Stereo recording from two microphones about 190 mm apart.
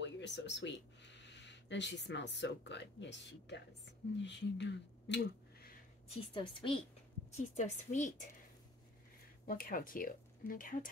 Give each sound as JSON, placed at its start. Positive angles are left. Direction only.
{"t": 0.0, "sound": "speech", "side_deg": 70}
{"t": 6.3, "sound": "a woman's voice", "side_deg": 25}
{"t": 7.5, "sound": "a woman's voice", "side_deg": 40}
{"t": 9.5, "sound": "speech", "side_deg": 50}